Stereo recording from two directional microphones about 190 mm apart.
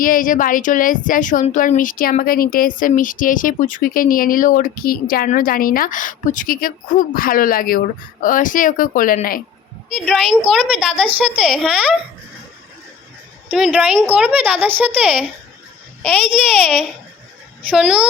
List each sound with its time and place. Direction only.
0.0 s a woman's voice: 45° left (ahead or behind)
9.9 s a child's voice: 5° left (ahead or behind)
13.5 s speech: 10° right (ahead or behind)
15.0 s a child's voice: 5° left (ahead or behind)
17.7 s a child's voice: 5° right (ahead or behind)